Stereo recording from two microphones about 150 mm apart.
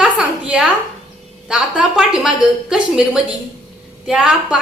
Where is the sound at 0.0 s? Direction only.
10° right (ahead or behind).